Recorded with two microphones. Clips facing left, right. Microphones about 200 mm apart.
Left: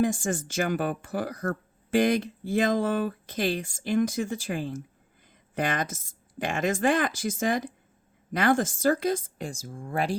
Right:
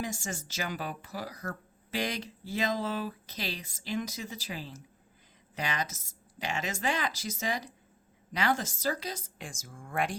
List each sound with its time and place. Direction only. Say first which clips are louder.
0.0 s speech: left 11 dB; 50° left (ahead or behind)
9.5 s speech: left 6 dB; 35° left (ahead or behind)